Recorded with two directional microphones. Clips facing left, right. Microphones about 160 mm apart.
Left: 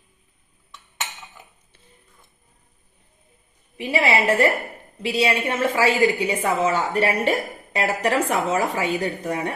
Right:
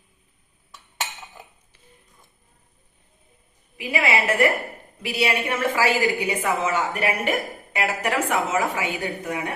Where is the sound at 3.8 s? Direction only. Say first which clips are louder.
Left 3 dB; 30° left (ahead or behind).